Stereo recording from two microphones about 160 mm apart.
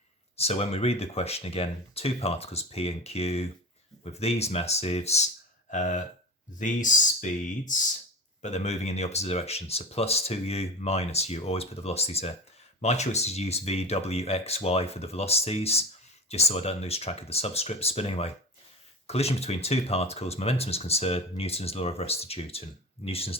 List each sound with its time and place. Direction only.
0.3 s speech: 40° left (ahead or behind)